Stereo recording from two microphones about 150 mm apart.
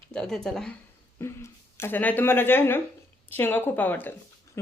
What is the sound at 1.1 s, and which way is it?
A woman's voice, 20° left (ahead or behind).